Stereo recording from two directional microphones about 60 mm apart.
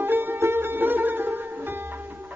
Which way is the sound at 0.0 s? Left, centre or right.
Right.